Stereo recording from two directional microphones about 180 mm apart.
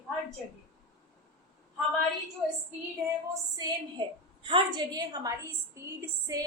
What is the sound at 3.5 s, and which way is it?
A woman's voice, 25° right (ahead or behind).